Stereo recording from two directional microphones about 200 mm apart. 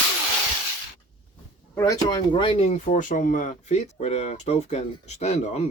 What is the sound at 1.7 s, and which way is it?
Speech, 15° left (ahead or behind).